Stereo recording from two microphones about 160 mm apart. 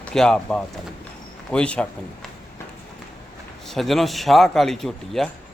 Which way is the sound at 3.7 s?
Centre (ahead or behind).